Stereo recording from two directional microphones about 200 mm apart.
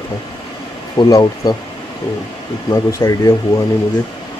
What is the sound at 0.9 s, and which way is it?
Speech, 20° left (ahead or behind).